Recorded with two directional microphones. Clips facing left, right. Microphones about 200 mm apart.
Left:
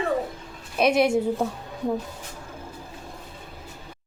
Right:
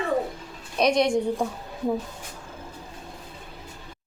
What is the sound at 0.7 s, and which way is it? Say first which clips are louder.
A woman's voice: left 1 dB; 5° left (ahead or behind).